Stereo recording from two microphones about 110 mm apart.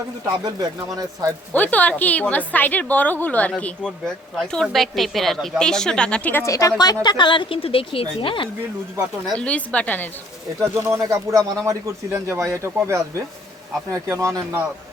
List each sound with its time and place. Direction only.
0.4 s speech: 35° right (ahead or behind)
1.5 s a woman's voice: 15° left (ahead or behind)
6.4 s speech: 30° left (ahead or behind); by 8.4 s 50° left (ahead or behind)
9.4 s a woman's voice: 10° left (ahead or behind)
10.6 s speech: 25° right (ahead or behind)